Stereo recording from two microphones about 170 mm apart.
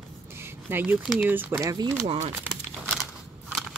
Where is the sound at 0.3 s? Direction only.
15° right (ahead or behind).